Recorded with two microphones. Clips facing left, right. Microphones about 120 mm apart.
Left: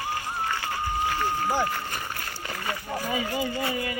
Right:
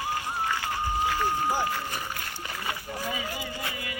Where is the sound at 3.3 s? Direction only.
40° left (ahead or behind).